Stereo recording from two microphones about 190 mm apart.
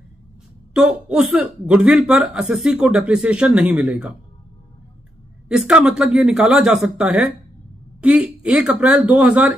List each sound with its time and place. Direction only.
0.7 s speech: 5° right (ahead or behind)
5.5 s speech: 5° right (ahead or behind)